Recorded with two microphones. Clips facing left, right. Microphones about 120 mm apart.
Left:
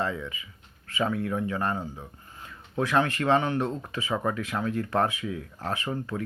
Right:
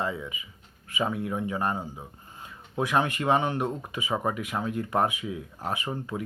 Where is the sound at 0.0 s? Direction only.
15° right (ahead or behind).